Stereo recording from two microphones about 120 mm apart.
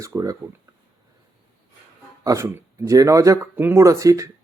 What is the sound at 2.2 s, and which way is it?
Speech, 25° right (ahead or behind).